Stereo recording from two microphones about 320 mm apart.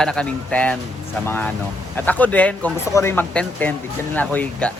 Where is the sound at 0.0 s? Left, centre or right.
Centre.